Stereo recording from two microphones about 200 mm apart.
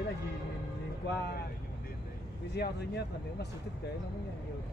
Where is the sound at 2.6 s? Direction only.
55° left (ahead or behind).